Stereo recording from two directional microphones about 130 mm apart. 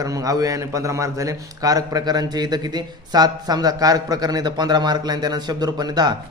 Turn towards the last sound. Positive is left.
turn(degrees=-30)  # may be behind; listen again after turning